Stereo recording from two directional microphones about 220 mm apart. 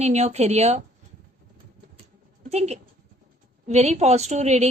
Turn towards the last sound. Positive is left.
turn(degrees=-30)  # may be behind; listen again after turning